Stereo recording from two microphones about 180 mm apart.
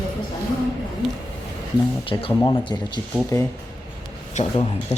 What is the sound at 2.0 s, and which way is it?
Speech, 30° left (ahead or behind).